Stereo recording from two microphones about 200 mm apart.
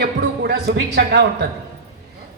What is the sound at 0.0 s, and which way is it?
A man's voice, 55° right (ahead or behind).